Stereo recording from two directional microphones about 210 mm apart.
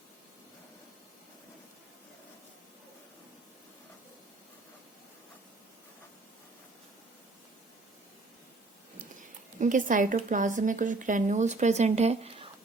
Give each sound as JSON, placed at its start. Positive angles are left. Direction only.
{"t": 9.6, "sound": "speech", "side_deg": -40}